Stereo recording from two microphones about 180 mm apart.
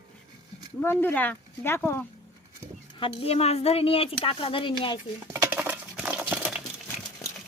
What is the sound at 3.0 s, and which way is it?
Speech, 35° left (ahead or behind).